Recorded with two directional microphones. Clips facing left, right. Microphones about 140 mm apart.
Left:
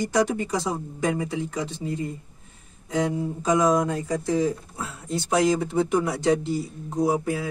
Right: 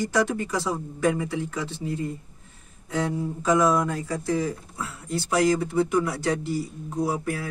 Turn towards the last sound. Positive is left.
turn(degrees=20)  # may be behind; listen again after turning